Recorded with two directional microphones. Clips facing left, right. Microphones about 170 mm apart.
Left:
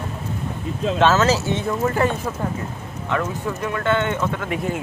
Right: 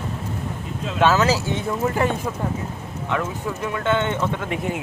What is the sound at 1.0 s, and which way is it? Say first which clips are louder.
Speech: even; 10° right (ahead or behind).